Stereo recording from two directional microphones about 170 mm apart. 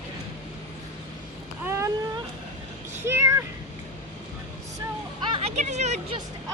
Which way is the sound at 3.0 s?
15° right (ahead or behind).